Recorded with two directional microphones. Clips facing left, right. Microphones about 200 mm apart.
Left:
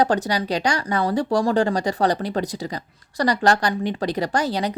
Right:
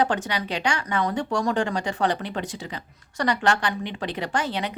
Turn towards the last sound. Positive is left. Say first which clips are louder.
# left 4 dB
turn(degrees=40)  # may be behind; listen again after turning